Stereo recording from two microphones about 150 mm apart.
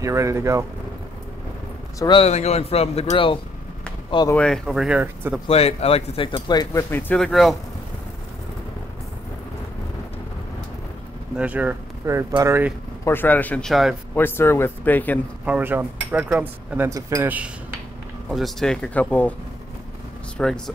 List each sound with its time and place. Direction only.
0.0 s speech: 20° right (ahead or behind)
2.0 s speech: 30° left (ahead or behind)
2.2 s speech: 45° left (ahead or behind)
4.4 s speech: centre (ahead or behind)
5.5 s speech: 45° left (ahead or behind); by 7.2 s 15° left (ahead or behind)
7.2 s speech: centre (ahead or behind)
11.3 s speech: 10° right (ahead or behind)
13.0 s speech: 15° left (ahead or behind)
14.1 s speech: 15° left (ahead or behind)
15.4 s speech: 10° right (ahead or behind)
18.3 s speech: centre (ahead or behind)
20.3 s speech: 5° left (ahead or behind)